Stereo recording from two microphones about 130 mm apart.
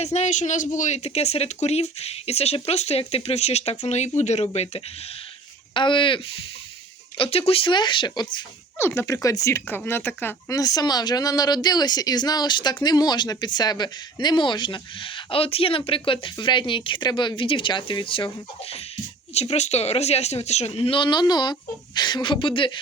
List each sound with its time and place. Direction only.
0.0 s speech: 60° left (ahead or behind)
5.7 s speech: 40° left (ahead or behind)
7.2 s speech: 50° left (ahead or behind)
9.0 s speech: 25° left (ahead or behind)
10.6 s speech: 30° left (ahead or behind)
19.3 s speech: 55° left (ahead or behind)